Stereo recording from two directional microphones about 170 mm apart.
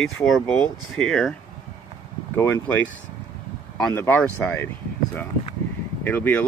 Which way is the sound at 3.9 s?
10° left (ahead or behind).